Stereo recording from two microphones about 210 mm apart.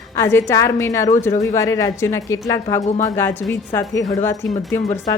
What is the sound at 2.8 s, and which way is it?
Speech, 35° left (ahead or behind).